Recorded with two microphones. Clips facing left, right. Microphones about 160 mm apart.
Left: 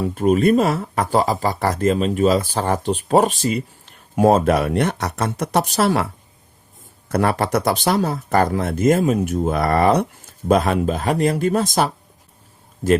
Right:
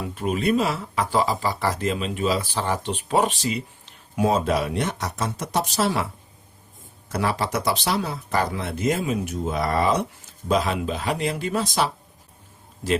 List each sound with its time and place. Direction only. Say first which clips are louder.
0.0 s speech: left 8 dB; 45° left (ahead or behind); by 6.1 s 60° left (ahead or behind)
7.1 s speech: left 6 dB; 55° left (ahead or behind)